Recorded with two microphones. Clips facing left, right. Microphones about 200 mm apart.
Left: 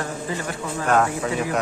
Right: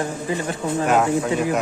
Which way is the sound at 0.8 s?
10° right (ahead or behind).